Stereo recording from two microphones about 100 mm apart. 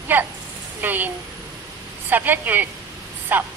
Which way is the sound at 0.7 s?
20° right (ahead or behind).